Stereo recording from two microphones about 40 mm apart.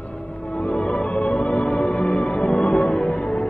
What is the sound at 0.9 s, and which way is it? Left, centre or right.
Music, left.